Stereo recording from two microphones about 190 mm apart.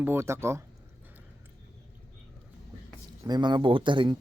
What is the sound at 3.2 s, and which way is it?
Speech, 20° right (ahead or behind).